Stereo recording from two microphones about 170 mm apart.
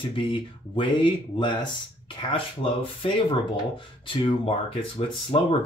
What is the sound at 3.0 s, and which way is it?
Speech, 30° left (ahead or behind).